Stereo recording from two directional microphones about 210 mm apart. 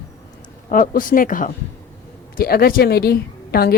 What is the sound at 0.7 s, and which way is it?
A woman's voice, 40° left (ahead or behind).